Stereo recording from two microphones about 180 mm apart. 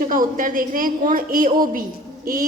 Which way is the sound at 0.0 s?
50° right (ahead or behind).